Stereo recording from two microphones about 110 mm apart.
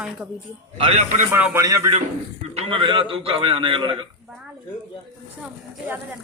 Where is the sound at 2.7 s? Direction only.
50° right (ahead or behind).